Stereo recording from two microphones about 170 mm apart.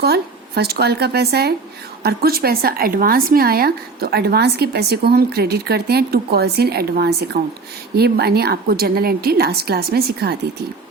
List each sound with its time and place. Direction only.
0.0 s a woman's voice: 70° right (ahead or behind)